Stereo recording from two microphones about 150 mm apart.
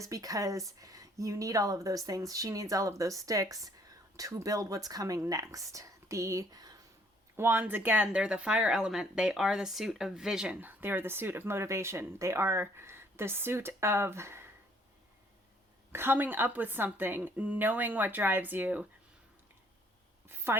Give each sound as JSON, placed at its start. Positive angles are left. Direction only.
{"t": 0.0, "sound": "speech", "side_deg": -25}
{"t": 15.9, "sound": "speech", "side_deg": -15}
{"t": 20.2, "sound": "a sound", "side_deg": -15}